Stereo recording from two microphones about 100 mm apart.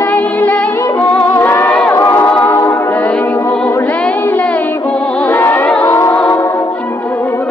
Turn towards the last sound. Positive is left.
turn(degrees=15)  # may be behind; listen again after turning